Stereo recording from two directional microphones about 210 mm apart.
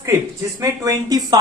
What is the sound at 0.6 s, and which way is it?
Speech, 15° right (ahead or behind).